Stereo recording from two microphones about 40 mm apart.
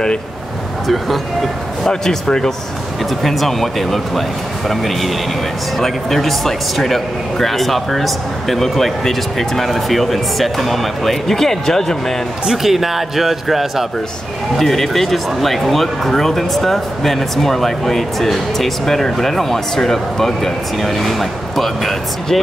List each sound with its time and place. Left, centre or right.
0.8 s speech: centre
1.9 s speech: centre
3.0 s speech: centre
12.4 s speech: centre